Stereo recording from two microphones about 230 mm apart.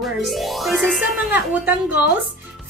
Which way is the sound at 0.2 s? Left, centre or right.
Centre.